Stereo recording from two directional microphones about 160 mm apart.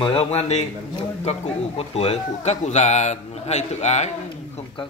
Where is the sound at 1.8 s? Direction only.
40° left (ahead or behind).